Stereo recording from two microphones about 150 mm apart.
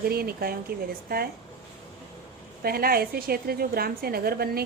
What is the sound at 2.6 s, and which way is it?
A woman's voice, 90° right.